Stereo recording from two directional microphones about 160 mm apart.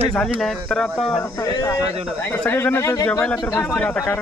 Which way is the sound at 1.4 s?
20° left (ahead or behind).